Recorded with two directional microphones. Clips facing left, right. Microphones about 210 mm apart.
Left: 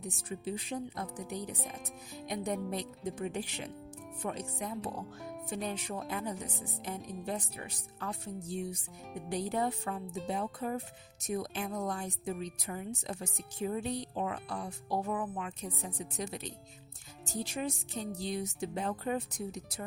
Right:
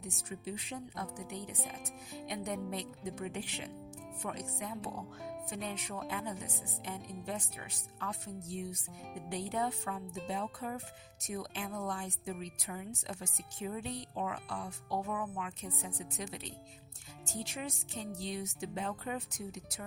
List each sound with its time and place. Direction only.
0.3 s a woman's voice: 35° left (ahead or behind)
2.2 s a woman's voice: 35° left (ahead or behind)
5.5 s a woman's voice: 35° left (ahead or behind)